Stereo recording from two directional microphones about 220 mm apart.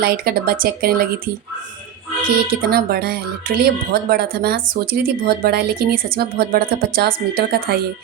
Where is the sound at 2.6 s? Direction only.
45° right (ahead or behind).